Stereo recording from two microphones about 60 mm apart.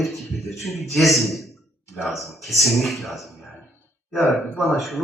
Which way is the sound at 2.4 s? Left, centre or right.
Centre.